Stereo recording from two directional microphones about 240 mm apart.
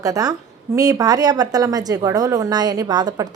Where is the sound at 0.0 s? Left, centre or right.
Centre.